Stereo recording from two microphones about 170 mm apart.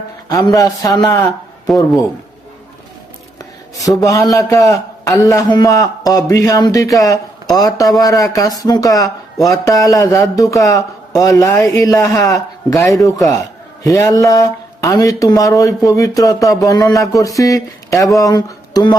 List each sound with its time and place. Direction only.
0.3 s speech: 20° left (ahead or behind)
1.6 s a man's voice: centre (ahead or behind)
3.8 s speech: 20° left (ahead or behind)
13.8 s speech: 20° left (ahead or behind)